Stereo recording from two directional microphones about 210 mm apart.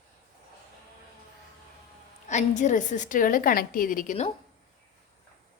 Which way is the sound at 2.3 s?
35° left (ahead or behind).